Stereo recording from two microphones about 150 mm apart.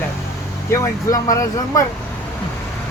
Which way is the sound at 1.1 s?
20° left (ahead or behind).